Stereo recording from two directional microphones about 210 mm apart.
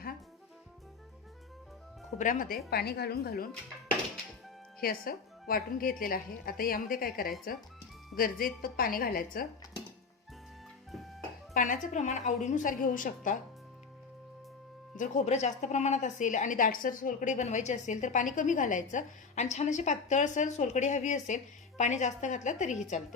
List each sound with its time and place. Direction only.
2.1 s a woman's voice: 40° left (ahead or behind)
4.8 s a woman's voice: 45° left (ahead or behind)
11.5 s a woman's voice: 40° left (ahead or behind)
14.9 s a woman's voice: 35° left (ahead or behind)